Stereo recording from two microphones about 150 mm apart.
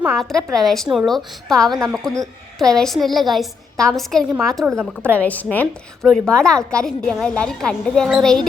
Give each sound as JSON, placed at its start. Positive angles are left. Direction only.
{"t": 0.1, "sound": "a woman's voice", "side_deg": 5}